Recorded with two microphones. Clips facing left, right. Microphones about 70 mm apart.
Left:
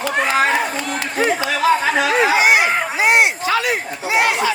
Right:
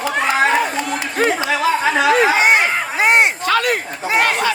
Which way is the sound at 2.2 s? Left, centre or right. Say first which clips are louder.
Even; right.